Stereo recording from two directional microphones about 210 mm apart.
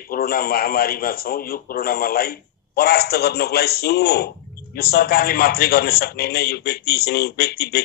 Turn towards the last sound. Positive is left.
turn(degrees=50)  # may be behind; listen again after turning